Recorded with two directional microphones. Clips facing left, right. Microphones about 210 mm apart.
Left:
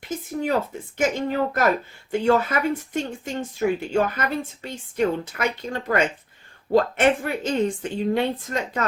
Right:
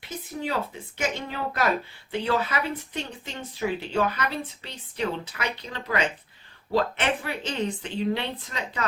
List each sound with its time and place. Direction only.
0.0 s speech: 45° left (ahead or behind)